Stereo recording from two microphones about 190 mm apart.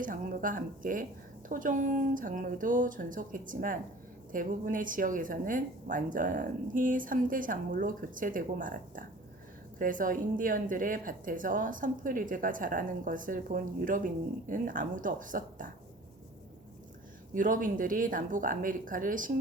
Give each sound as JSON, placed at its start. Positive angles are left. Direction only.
{"t": 0.0, "sound": "speech", "side_deg": -45}
{"t": 17.3, "sound": "speech", "side_deg": -45}